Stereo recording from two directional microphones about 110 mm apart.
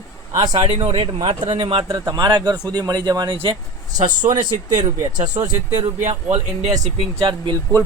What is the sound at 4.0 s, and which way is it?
Speech, 45° right (ahead or behind).